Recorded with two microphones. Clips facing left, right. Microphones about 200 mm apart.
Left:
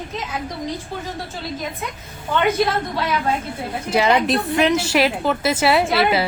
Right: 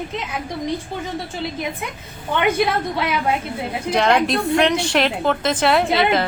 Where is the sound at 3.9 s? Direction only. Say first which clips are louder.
Even; 5° left (ahead or behind).